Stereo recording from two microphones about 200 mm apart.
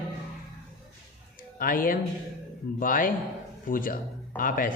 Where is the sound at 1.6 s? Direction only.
45° left (ahead or behind).